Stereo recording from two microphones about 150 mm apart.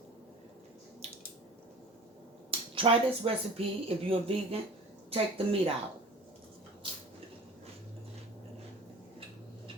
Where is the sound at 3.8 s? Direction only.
40° right (ahead or behind).